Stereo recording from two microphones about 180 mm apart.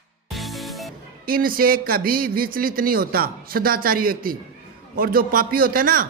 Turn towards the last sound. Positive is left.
turn(degrees=-50)  # may be behind; listen again after turning